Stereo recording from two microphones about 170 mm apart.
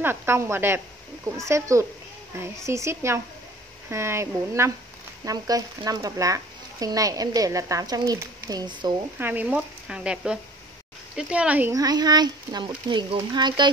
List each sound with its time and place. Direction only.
0.0 s a child's voice: 15° right (ahead or behind)
9.2 s speech: 10° right (ahead or behind)
11.7 s a child's voice: 20° right (ahead or behind)